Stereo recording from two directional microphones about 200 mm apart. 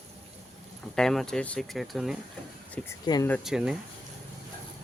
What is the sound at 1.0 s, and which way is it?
Speech, 5° left (ahead or behind).